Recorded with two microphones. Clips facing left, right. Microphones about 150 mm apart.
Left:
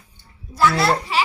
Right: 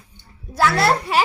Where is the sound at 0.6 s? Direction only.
60° right (ahead or behind).